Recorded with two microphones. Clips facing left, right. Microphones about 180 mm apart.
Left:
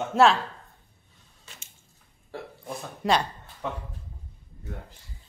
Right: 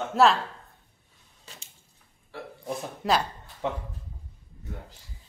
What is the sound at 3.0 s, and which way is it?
Speech, centre (ahead or behind).